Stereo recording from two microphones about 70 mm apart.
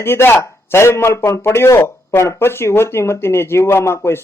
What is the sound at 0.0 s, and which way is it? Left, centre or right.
Speech, left.